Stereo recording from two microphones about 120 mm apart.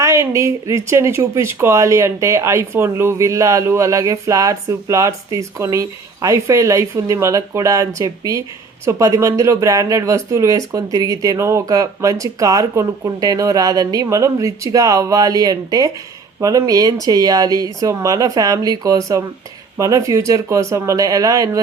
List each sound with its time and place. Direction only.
0.0 s speech: 25° right (ahead or behind)